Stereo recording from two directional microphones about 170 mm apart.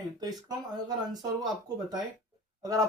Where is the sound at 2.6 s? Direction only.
20° right (ahead or behind).